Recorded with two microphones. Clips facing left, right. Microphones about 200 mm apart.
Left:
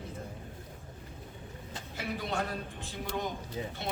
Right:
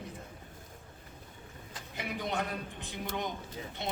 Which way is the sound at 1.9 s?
20° right (ahead or behind).